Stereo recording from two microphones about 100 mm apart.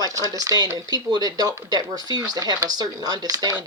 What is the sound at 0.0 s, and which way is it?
Speech, 35° right (ahead or behind).